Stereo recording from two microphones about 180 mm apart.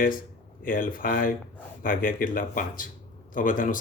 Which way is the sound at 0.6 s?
50° left (ahead or behind).